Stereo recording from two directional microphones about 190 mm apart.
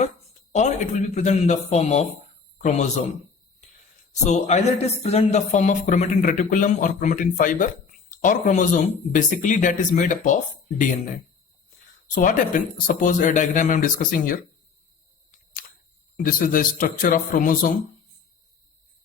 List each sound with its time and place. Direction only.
0.5 s speech: 35° left (ahead or behind)
4.1 s speech: 35° left (ahead or behind)
12.1 s speech: 45° left (ahead or behind)
16.1 s speech: 45° left (ahead or behind)